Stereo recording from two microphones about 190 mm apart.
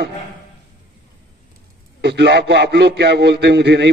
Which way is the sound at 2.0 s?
65° right (ahead or behind).